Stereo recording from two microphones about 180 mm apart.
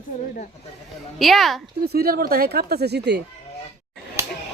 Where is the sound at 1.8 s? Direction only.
60° right (ahead or behind).